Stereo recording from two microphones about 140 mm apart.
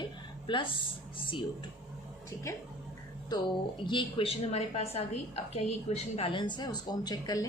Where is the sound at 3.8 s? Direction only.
40° left (ahead or behind).